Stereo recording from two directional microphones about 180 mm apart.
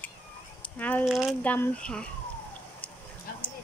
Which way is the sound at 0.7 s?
10° left (ahead or behind).